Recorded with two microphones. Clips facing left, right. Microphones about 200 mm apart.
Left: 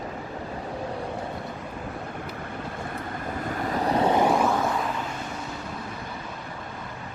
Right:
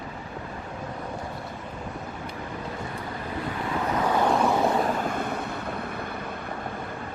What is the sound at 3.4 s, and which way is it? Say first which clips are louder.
Vehicle: left 2 dB; 45° left (ahead or behind).